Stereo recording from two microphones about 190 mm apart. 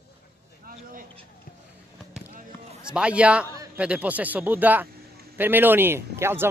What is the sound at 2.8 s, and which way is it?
A man's voice, 5° right (ahead or behind).